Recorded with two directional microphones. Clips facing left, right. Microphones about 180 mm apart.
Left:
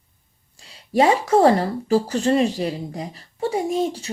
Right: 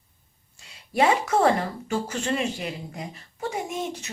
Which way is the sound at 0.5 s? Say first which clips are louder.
Left 7 dB; 30° left (ahead or behind).